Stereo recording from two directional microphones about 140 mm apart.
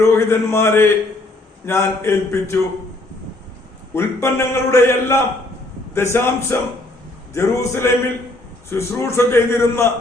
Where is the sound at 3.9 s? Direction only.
20° left (ahead or behind).